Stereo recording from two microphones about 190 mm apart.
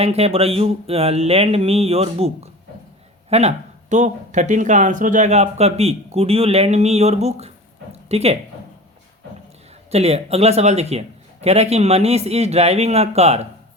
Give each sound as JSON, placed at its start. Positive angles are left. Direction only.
{"t": 0.0, "sound": "speech", "side_deg": -30}
{"t": 9.9, "sound": "speech", "side_deg": -35}